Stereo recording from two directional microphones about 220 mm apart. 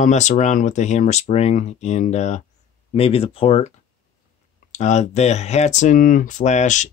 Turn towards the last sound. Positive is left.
turn(degrees=35)  # may be behind; listen again after turning